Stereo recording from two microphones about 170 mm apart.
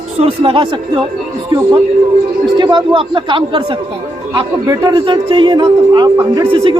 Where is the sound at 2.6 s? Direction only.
30° right (ahead or behind).